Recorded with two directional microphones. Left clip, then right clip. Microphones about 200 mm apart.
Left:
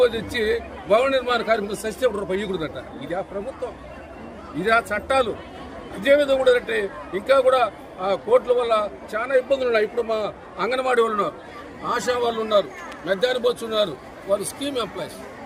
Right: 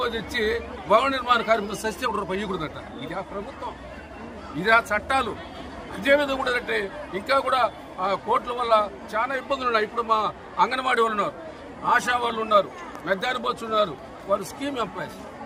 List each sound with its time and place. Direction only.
0.0 s a man's voice: 5° right (ahead or behind)
4.6 s a man's voice: 5° right (ahead or behind)